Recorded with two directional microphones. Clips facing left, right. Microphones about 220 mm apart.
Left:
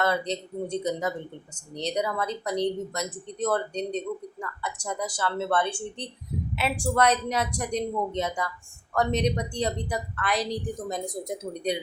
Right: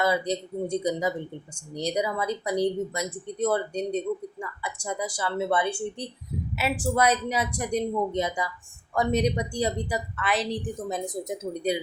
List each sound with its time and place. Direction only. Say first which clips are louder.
0.0 s speech: right 2 dB; 10° right (ahead or behind)